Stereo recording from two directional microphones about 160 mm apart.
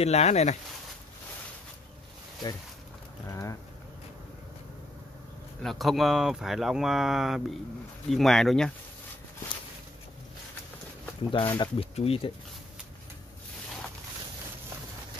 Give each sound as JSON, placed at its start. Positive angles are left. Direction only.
{"t": 0.0, "sound": "speech", "side_deg": 40}
{"t": 3.3, "sound": "speech", "side_deg": 20}
{"t": 5.6, "sound": "speech", "side_deg": 0}
{"t": 11.3, "sound": "speech", "side_deg": 30}